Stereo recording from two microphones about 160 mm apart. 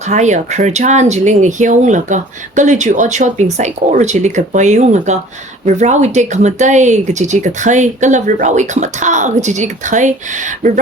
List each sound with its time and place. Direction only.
0.0 s speech: 45° right (ahead or behind)